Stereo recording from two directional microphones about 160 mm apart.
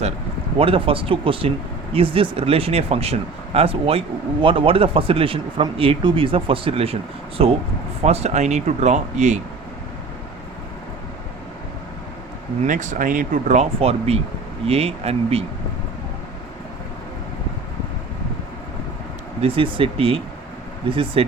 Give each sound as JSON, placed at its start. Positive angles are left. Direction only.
{"t": 0.6, "sound": "speech", "side_deg": -35}
{"t": 12.6, "sound": "speech", "side_deg": -55}
{"t": 19.4, "sound": "speech", "side_deg": -35}